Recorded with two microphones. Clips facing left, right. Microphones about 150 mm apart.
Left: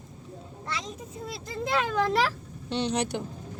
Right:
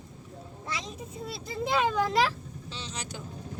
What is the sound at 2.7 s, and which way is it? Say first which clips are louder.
Vehicle: left 14 dB; 65° left (ahead or behind).